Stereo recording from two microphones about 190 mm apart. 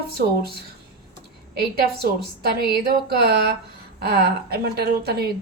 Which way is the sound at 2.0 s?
55° right (ahead or behind).